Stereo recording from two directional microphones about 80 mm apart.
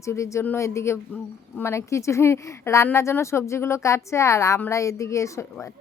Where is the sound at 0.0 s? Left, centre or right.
Left.